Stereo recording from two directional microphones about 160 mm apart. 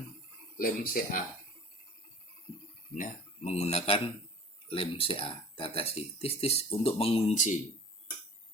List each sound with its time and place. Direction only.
0.5 s speech: 60° left (ahead or behind)
2.9 s speech: 50° left (ahead or behind)
7.3 s speech: 50° left (ahead or behind)